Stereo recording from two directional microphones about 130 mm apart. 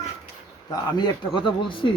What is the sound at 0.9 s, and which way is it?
Speech, 35° left (ahead or behind).